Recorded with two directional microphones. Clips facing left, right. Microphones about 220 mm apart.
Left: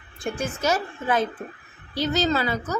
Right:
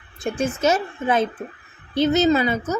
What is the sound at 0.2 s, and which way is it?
A woman's voice, 25° right (ahead or behind).